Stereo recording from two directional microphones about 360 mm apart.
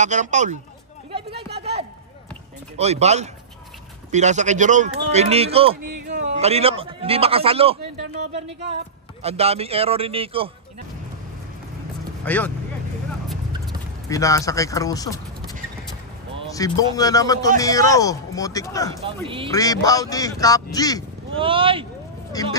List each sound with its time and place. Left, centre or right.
0.0 s a man's voice: centre
1.1 s a sound: centre
2.8 s a man's voice: centre
5.8 s a sound: right
6.0 s a man's voice: right
9.2 s a man's voice: centre
12.3 s speech: centre
14.0 s speech: centre
16.5 s a man's voice: centre
19.2 s a man's voice: centre
19.5 s a man's voice: centre
21.4 s a man's voice: centre
22.3 s speech: centre